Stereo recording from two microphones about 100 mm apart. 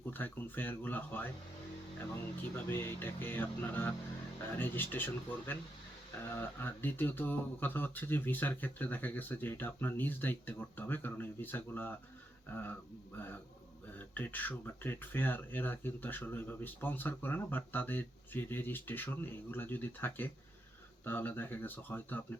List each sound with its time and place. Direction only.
0.1 s speech: 20° left (ahead or behind)
2.4 s speech: 20° left (ahead or behind)
13.1 s speech: 20° left (ahead or behind)